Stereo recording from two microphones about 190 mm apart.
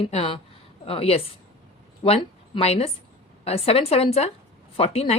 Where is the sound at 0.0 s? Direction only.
30° left (ahead or behind).